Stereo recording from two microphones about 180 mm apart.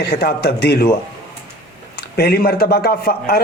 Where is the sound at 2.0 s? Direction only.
60° left (ahead or behind).